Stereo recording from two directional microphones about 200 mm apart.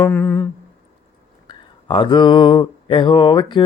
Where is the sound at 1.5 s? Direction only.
25° left (ahead or behind).